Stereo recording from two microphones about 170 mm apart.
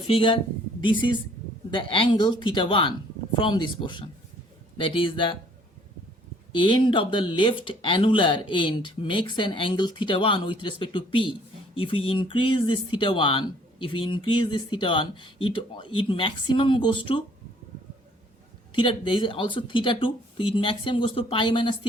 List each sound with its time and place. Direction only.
0.1 s speech: 30° left (ahead or behind)
6.5 s speech: 30° left (ahead or behind)
18.7 s speech: 30° left (ahead or behind)